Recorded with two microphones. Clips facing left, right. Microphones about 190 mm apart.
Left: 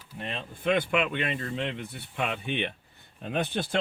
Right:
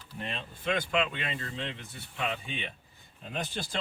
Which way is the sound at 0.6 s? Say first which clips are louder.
Left 4 dB; 60° left (ahead or behind).